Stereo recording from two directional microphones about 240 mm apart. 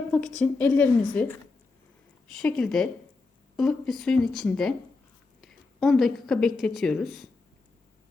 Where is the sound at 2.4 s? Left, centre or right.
Centre.